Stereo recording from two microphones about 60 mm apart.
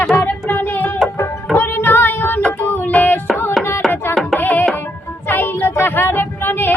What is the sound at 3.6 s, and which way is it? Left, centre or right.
Music, centre.